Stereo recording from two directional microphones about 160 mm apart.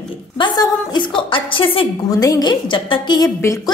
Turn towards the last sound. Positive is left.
turn(degrees=20)  # may be behind; listen again after turning